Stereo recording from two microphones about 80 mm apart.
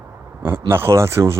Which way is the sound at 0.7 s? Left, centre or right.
Right.